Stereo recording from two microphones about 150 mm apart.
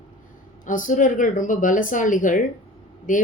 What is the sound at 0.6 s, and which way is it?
Speech, 60° left (ahead or behind).